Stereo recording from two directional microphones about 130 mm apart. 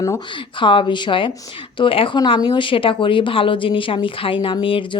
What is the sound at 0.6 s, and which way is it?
A woman's voice, 40° left (ahead or behind).